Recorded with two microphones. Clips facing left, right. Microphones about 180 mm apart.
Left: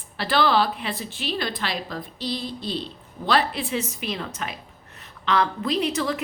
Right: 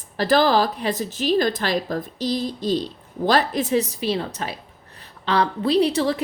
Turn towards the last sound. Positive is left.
turn(degrees=-30)  # may be behind; listen again after turning